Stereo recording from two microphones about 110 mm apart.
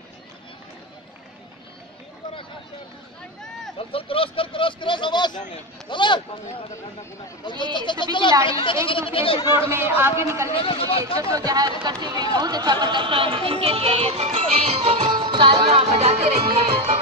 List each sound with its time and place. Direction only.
3.7 s speech: 55° left (ahead or behind)
7.7 s a man's voice: 45° left (ahead or behind)
9.4 s speech: 45° left (ahead or behind)
9.7 s a man's voice: 20° right (ahead or behind)
10.5 s a man's voice: 55° left (ahead or behind)
11.1 s speech: 30° right (ahead or behind); by 14.8 s 85° right
15.0 s music: 45° right (ahead or behind); by 16.6 s 75° right (ahead or behind)
16.7 s music: 55° right (ahead or behind)